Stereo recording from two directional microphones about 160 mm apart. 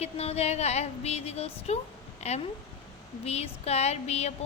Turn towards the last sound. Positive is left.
turn(degrees=40)  # may be behind; listen again after turning